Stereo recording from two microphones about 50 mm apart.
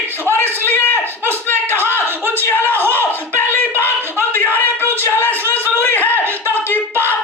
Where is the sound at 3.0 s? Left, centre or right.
Left.